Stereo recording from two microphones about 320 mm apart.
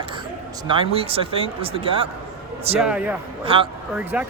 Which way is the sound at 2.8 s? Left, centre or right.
Centre.